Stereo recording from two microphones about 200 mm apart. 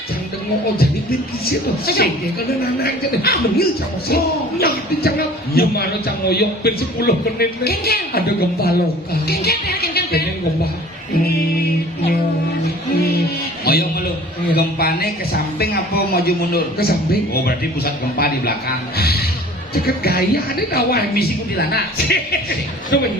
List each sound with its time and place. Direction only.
1.5 s speech: 50° left (ahead or behind)
13.7 s a sound: 50° left (ahead or behind)
14.5 s speech: 50° left (ahead or behind)
18.9 s music: 50° left (ahead or behind)
19.8 s speech: 50° left (ahead or behind)